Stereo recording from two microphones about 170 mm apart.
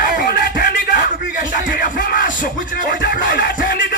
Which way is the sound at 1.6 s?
50° left (ahead or behind).